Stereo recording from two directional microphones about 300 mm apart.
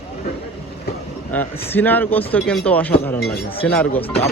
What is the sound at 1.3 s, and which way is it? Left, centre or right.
Speech, centre.